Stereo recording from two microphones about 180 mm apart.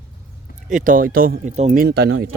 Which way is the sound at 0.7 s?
45° right (ahead or behind).